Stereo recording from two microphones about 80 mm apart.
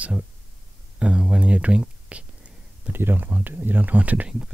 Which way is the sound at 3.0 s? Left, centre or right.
Right.